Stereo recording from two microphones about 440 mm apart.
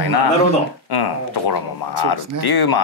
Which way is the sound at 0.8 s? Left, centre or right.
Left.